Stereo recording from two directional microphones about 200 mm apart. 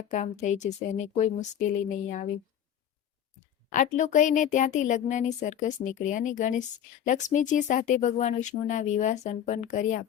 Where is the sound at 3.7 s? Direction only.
40° left (ahead or behind).